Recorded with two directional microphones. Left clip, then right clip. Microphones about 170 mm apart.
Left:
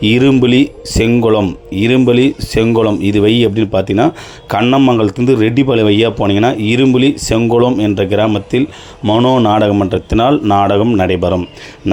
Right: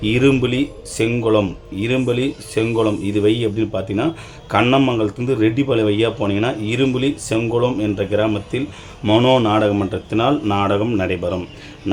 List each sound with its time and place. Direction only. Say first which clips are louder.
0.0 s a man's voice: left 6 dB; 40° left (ahead or behind)
4.6 s speech: left 6 dB; 25° left (ahead or behind)
4.9 s a man's voice: left 7 dB; 40° left (ahead or behind)
9.0 s speech: left 3 dB; 15° left (ahead or behind)
9.5 s a man's voice: left 6 dB; 35° left (ahead or behind)